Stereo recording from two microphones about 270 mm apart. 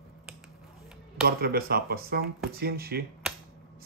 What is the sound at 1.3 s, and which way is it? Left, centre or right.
Speech, right.